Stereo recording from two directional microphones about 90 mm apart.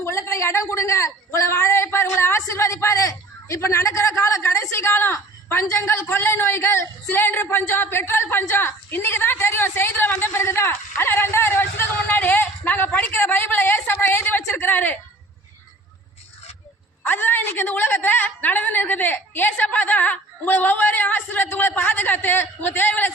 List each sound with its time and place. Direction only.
0.0 s a man's voice: 30° left (ahead or behind)
17.0 s a woman's voice: 20° left (ahead or behind)